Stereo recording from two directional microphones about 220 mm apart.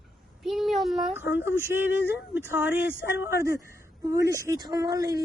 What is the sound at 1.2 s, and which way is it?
Speech, 55° left (ahead or behind).